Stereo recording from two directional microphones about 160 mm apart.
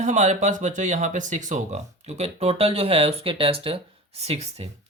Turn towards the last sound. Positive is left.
turn(degrees=-40)  # may be behind; listen again after turning